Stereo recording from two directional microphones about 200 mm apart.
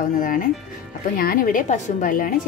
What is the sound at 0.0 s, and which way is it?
A woman's voice, 45° left (ahead or behind).